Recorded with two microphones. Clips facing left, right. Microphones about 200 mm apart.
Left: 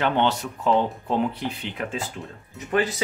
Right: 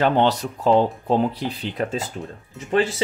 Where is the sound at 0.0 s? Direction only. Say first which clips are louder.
Right 4 dB; 35° right (ahead or behind).